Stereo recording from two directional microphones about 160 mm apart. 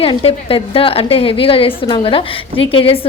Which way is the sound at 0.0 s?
35° left (ahead or behind).